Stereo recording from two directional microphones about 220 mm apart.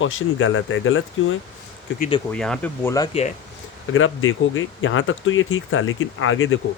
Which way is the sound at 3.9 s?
65° left (ahead or behind).